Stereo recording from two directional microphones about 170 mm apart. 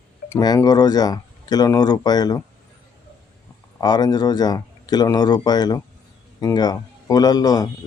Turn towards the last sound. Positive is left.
turn(degrees=25)  # may be behind; listen again after turning